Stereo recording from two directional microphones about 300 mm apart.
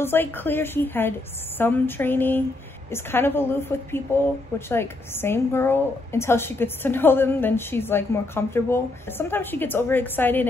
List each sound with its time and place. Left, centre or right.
0.0 s a woman's voice: centre